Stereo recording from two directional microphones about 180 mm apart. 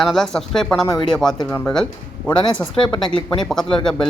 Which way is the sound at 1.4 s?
5° left (ahead or behind).